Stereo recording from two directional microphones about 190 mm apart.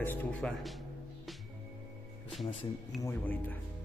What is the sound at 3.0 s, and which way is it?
Speech, 10° left (ahead or behind).